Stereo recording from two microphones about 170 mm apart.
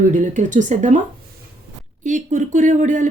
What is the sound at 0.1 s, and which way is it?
Speech, 50° right (ahead or behind).